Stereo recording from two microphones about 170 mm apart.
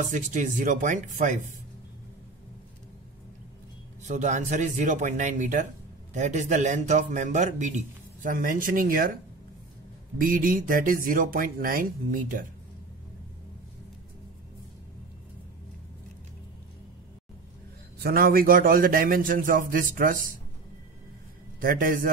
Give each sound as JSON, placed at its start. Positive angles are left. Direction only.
{"t": 0.1, "sound": "a man's voice", "side_deg": -45}
{"t": 4.0, "sound": "a man's voice", "side_deg": -45}
{"t": 10.1, "sound": "a man's voice", "side_deg": -55}
{"t": 17.9, "sound": "a man's voice", "side_deg": -65}
{"t": 21.5, "sound": "a man's voice", "side_deg": -55}